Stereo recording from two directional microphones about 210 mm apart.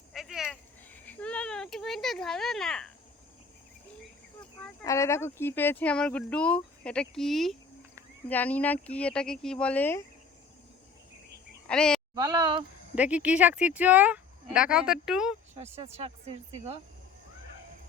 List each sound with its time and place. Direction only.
0.1 s a sound: centre (ahead or behind)
1.0 s speech: 5° left (ahead or behind)
4.8 s speech: 15° left (ahead or behind)
11.7 s speech: 5° left (ahead or behind)
12.1 s speech: 20° right (ahead or behind)
13.0 s speech: 5° right (ahead or behind)
15.8 s speech: 30° right (ahead or behind)